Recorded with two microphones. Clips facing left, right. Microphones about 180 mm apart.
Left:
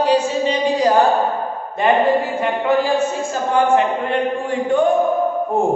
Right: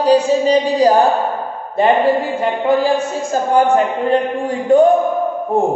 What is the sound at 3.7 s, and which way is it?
Speech, 40° right (ahead or behind).